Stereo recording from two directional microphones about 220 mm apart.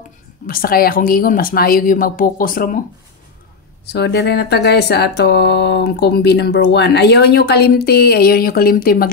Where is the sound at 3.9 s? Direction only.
50° left (ahead or behind).